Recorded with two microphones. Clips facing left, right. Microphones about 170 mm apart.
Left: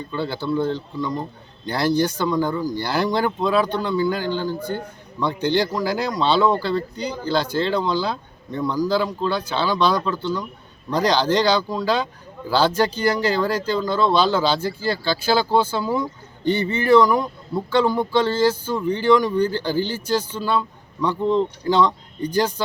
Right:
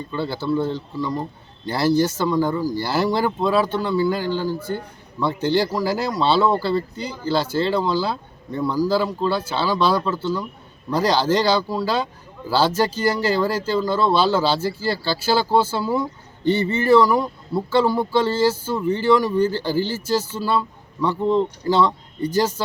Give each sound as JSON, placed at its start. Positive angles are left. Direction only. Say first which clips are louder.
{"t": 0.1, "sound": "speech", "louder": "right 1 dB", "side_deg": -5}
{"t": 16.5, "sound": "speech", "louder": "right 1 dB", "side_deg": -35}
{"t": 16.9, "sound": "speech", "louder": "even", "side_deg": -5}